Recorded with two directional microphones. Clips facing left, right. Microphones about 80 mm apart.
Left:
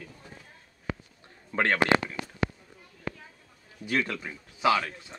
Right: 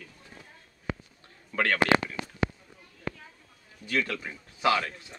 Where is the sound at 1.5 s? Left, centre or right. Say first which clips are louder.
Left 1 dB; left.